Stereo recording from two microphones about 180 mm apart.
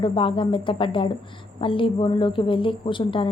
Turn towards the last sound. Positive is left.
turn(degrees=30)  # may be behind; listen again after turning